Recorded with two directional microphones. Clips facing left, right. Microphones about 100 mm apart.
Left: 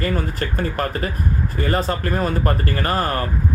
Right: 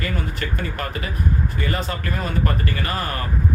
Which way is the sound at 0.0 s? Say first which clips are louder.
Left 4 dB; 40° left (ahead or behind).